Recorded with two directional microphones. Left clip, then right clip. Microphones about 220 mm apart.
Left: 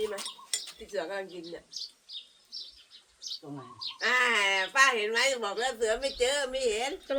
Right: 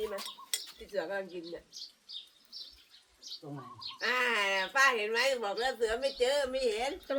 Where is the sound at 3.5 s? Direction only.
30° left (ahead or behind).